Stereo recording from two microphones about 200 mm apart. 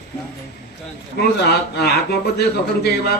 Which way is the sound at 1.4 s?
55° left (ahead or behind).